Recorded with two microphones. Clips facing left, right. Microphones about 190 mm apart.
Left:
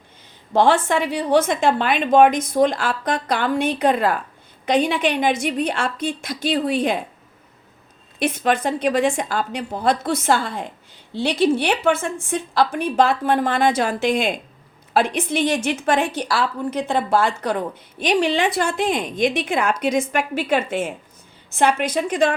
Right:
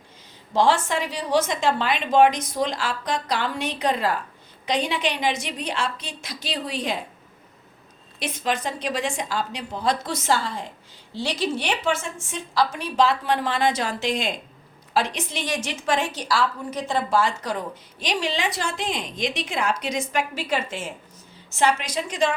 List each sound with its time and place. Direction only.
0.5 s a woman's voice: 55° left (ahead or behind)
8.2 s a woman's voice: 55° left (ahead or behind)